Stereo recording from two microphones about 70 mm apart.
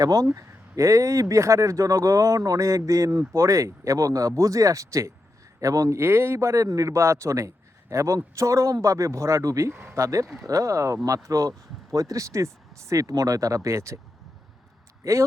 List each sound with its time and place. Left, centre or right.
0.0 s speech: right
6.0 s speech: right
15.0 s speech: right